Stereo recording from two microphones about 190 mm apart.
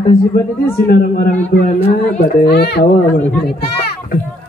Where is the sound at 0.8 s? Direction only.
50° left (ahead or behind).